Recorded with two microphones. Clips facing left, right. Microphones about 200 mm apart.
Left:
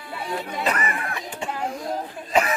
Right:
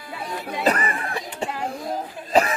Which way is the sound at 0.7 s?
30° right (ahead or behind).